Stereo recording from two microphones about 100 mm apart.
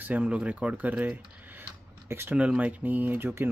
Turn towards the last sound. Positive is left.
turn(degrees=-20)  # may be behind; listen again after turning